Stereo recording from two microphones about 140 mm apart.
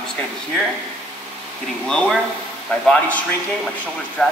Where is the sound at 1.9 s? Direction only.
5° left (ahead or behind).